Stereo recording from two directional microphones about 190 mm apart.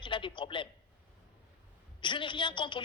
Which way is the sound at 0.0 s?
25° left (ahead or behind).